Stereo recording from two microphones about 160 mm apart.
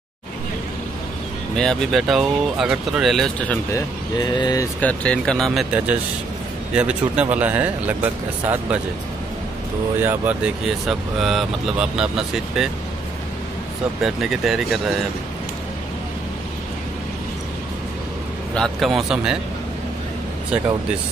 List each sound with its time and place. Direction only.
1.6 s speech: centre (ahead or behind)
3.7 s speech: 25° left (ahead or behind)
4.7 s speech: 10° left (ahead or behind); by 8.8 s 10° right (ahead or behind)
9.9 s speech: 10° right (ahead or behind)
14.0 s speech: centre (ahead or behind)
18.5 s speech: centre (ahead or behind)